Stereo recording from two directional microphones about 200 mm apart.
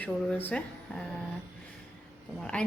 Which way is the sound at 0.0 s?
10° left (ahead or behind).